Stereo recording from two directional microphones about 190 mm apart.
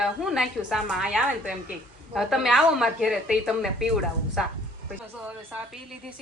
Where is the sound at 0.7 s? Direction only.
Centre (ahead or behind).